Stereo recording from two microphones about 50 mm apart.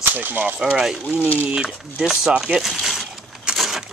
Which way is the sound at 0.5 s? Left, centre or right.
Centre.